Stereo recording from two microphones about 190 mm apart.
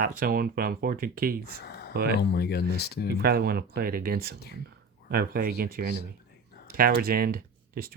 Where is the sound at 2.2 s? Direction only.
60° left (ahead or behind).